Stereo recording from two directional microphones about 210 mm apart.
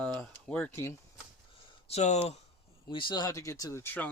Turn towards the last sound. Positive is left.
turn(degrees=10)  # may be behind; listen again after turning